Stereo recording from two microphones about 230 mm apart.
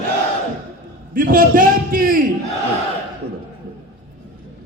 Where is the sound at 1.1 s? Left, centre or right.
Right.